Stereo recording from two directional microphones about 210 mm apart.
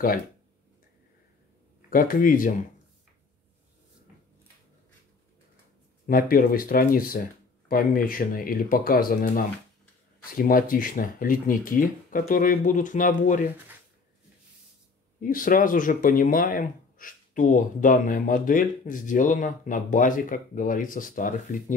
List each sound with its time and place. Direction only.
1.9 s speech: 40° left (ahead or behind)
6.0 s speech: 45° left (ahead or behind)
15.1 s speech: 40° left (ahead or behind)